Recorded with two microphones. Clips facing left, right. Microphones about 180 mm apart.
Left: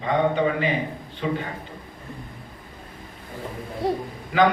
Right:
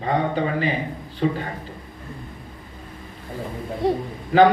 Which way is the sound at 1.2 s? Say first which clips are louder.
Right 4 dB; 40° right (ahead or behind).